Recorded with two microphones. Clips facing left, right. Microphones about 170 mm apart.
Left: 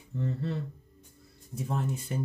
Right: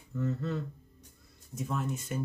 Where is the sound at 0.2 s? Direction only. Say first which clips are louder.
Even; 30° left (ahead or behind).